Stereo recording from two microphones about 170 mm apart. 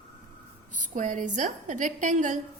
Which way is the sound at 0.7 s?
50° right (ahead or behind).